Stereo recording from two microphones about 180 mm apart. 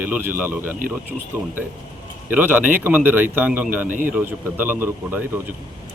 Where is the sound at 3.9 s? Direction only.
50° right (ahead or behind).